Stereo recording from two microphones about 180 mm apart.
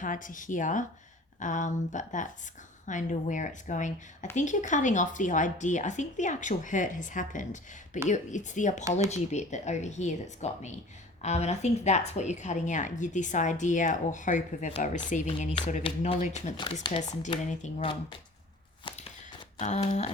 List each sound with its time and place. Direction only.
0.0 s speech: 45° left (ahead or behind)
15.9 s speech: 30° left (ahead or behind)
16.2 s speech: 45° left (ahead or behind)
18.9 s a sound: 30° left (ahead or behind)
19.5 s speech: 40° left (ahead or behind)